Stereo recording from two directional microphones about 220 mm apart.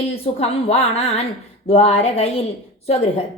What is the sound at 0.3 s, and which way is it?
A woman's voice, 30° left (ahead or behind).